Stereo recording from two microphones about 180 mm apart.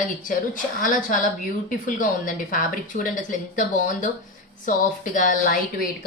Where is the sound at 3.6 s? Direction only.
45° left (ahead or behind).